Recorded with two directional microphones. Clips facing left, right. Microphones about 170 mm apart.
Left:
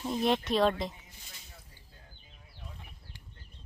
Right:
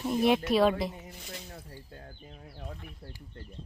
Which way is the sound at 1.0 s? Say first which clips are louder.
Right 13 dB; 65° right (ahead or behind).